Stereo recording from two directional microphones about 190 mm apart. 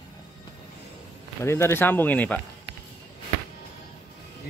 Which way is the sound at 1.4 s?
15° left (ahead or behind).